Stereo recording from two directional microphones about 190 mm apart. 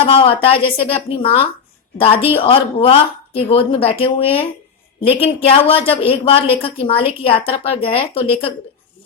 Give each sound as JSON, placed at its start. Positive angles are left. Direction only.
{"t": 0.0, "sound": "a woman's voice", "side_deg": 30}